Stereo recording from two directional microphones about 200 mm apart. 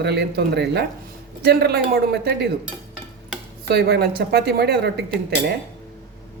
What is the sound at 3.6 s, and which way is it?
Speech, 55° right (ahead or behind).